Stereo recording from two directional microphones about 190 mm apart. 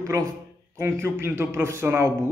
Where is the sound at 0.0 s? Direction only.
15° right (ahead or behind).